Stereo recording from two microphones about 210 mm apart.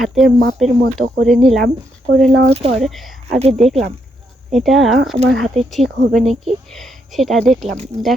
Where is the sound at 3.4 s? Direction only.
30° right (ahead or behind).